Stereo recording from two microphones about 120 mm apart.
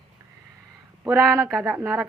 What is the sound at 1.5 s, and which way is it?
Speech, 5° right (ahead or behind).